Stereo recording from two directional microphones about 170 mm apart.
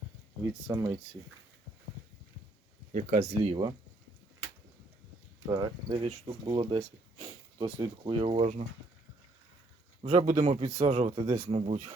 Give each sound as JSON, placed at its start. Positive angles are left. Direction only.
{"t": 0.7, "sound": "speech", "side_deg": -20}
{"t": 2.9, "sound": "speech", "side_deg": -50}
{"t": 5.5, "sound": "speech", "side_deg": -20}
{"t": 6.0, "sound": "speech", "side_deg": -35}
{"t": 10.0, "sound": "speech", "side_deg": -40}